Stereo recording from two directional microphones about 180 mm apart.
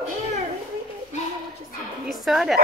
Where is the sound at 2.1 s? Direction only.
Centre (ahead or behind).